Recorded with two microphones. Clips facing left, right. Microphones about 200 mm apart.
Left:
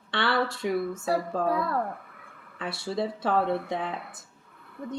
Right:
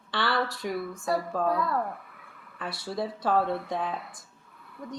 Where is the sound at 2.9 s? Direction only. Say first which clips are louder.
Left 2 dB; 25° left (ahead or behind).